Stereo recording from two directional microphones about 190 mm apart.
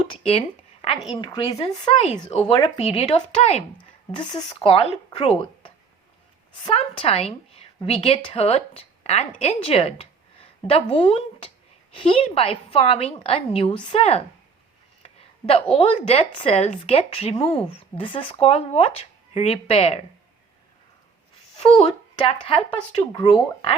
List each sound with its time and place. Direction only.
0.3 s a sound: 30° left (ahead or behind)
1.1 s speech: 25° left (ahead or behind)
4.1 s a woman's voice: 25° left (ahead or behind)
22.3 s speech: 30° left (ahead or behind)